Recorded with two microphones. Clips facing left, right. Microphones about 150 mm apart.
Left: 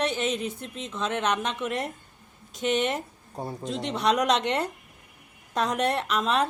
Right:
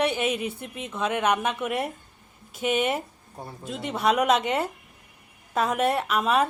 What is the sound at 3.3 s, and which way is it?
Speech, 25° left (ahead or behind).